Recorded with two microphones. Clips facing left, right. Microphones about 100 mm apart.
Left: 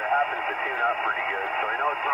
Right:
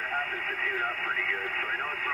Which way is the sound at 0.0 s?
40° left (ahead or behind).